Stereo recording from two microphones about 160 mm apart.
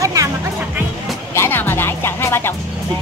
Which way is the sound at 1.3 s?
15° left (ahead or behind).